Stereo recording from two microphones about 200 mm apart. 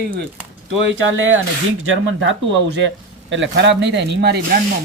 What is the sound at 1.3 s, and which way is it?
Speech, 80° right.